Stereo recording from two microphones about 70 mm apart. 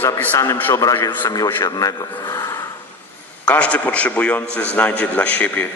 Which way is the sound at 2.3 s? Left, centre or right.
Left.